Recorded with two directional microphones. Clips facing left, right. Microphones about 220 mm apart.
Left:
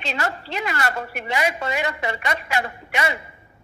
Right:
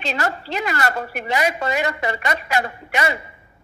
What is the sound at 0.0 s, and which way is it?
A man's voice, 40° right (ahead or behind).